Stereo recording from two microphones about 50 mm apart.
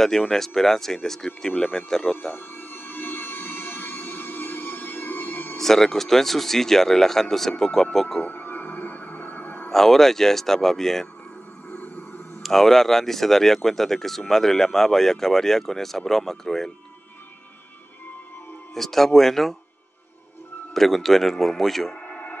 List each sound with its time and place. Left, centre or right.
0.1 s speech: centre
2.3 s music: left
5.6 s speech: centre
8.3 s music: left
9.7 s speech: centre
11.7 s a sound: left
12.4 s speech: centre
18.8 s speech: centre
20.7 s speech: centre
21.9 s a sound: left